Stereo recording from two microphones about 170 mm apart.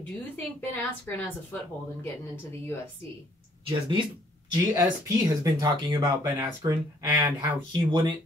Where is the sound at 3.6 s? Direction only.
30° right (ahead or behind).